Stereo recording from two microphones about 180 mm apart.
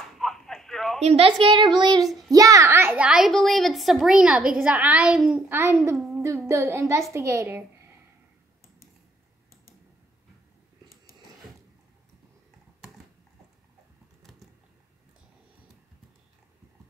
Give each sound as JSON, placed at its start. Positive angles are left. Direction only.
{"t": 0.2, "sound": "a sound", "side_deg": 0}
{"t": 1.0, "sound": "a woman's voice", "side_deg": -35}
{"t": 5.6, "sound": "a woman's voice", "side_deg": -15}